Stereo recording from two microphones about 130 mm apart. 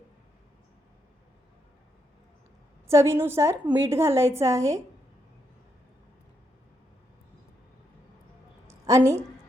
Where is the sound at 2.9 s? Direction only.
20° right (ahead or behind).